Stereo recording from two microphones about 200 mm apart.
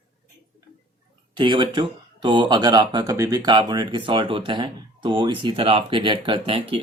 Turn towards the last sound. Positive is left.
turn(degrees=-25)  # may be behind; listen again after turning